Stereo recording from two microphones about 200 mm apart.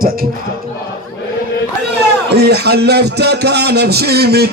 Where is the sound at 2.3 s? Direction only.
55° right (ahead or behind).